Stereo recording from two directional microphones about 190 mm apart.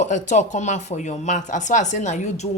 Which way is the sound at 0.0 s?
40° left (ahead or behind).